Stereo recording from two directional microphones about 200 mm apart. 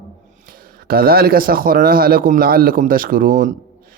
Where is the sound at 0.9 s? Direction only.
50° right (ahead or behind).